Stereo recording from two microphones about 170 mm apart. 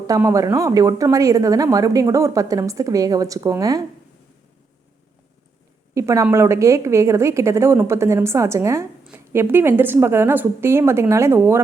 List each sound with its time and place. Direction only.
0.1 s speech: 20° right (ahead or behind)
5.9 s a woman's voice: 20° right (ahead or behind)